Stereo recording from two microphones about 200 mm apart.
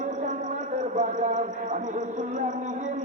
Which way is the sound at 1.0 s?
40° right (ahead or behind).